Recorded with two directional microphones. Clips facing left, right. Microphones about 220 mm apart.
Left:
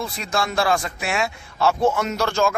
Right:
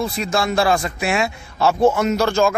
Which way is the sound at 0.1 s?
5° right (ahead or behind).